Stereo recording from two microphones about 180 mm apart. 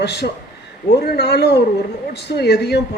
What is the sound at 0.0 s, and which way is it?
A man's voice, 70° left (ahead or behind).